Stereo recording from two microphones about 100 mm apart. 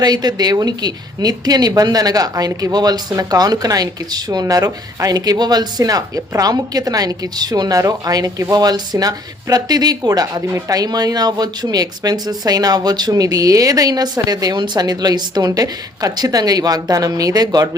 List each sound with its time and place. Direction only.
0.0 s a woman's voice: 45° right (ahead or behind)